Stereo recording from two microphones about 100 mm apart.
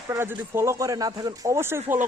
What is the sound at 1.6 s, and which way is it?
Speech, 25° right (ahead or behind).